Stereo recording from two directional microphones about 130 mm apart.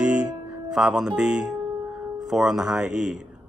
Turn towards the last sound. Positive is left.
turn(degrees=-5)  # may be behind; listen again after turning